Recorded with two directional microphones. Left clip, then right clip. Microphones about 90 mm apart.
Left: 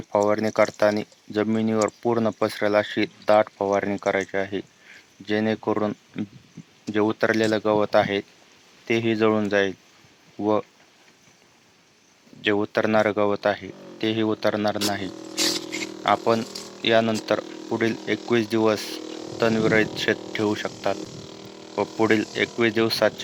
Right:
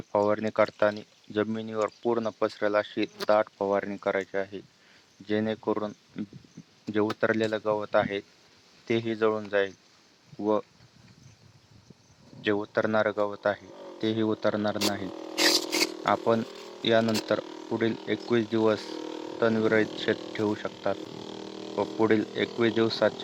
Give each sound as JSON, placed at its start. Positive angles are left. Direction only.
{"t": 0.3, "sound": "speech", "side_deg": 30}
{"t": 12.4, "sound": "speech", "side_deg": 20}
{"t": 14.8, "sound": "speech", "side_deg": 30}
{"t": 15.1, "sound": "a sound", "side_deg": -35}
{"t": 15.4, "sound": "a sound", "side_deg": 35}
{"t": 16.0, "sound": "speech", "side_deg": 25}
{"t": 17.7, "sound": "speech", "side_deg": 35}
{"t": 18.3, "sound": "speech", "side_deg": 20}
{"t": 19.0, "sound": "a sound", "side_deg": 35}
{"t": 19.4, "sound": "speech", "side_deg": 25}
{"t": 20.1, "sound": "speech", "side_deg": 35}
{"t": 20.9, "sound": "a sound", "side_deg": 35}
{"t": 22.1, "sound": "speech", "side_deg": 15}